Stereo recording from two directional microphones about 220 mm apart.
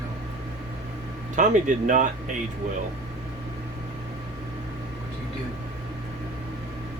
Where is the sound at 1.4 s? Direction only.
35° right (ahead or behind).